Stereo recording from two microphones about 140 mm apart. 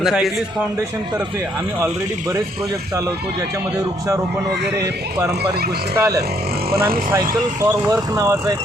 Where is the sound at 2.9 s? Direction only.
25° right (ahead or behind).